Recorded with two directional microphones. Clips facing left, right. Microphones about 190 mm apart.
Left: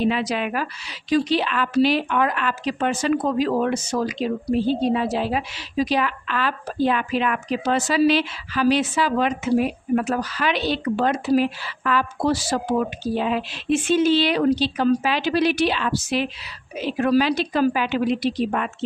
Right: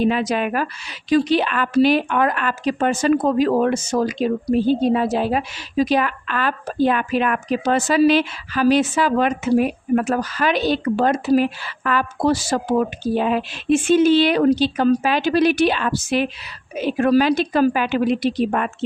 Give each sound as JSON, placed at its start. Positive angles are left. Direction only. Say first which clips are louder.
{"t": 0.0, "sound": "speech", "louder": "right 3 dB", "side_deg": -45}